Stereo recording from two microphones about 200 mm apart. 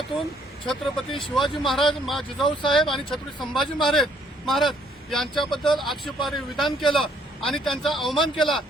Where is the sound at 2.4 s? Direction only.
25° left (ahead or behind).